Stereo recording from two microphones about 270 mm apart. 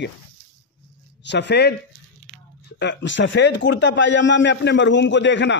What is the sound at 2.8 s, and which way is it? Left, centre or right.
A man's voice, left.